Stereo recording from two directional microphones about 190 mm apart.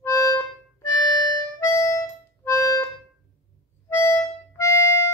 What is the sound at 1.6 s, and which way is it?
Harmonica, 15° left (ahead or behind).